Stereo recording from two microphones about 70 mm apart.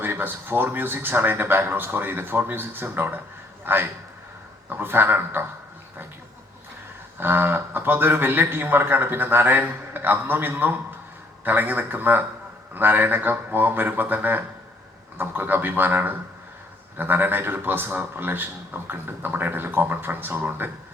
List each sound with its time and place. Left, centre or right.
0.0 s a man's voice: right
7.2 s a man's voice: right